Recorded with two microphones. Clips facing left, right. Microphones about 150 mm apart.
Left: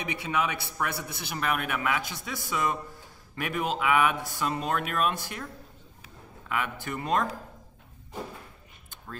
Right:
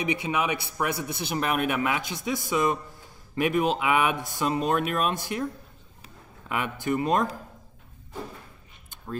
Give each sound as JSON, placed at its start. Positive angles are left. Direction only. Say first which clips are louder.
{"t": 0.0, "sound": "a man's voice", "louder": "right 3 dB", "side_deg": -15}
{"t": 6.5, "sound": "a man's voice", "louder": "right 5 dB", "side_deg": -20}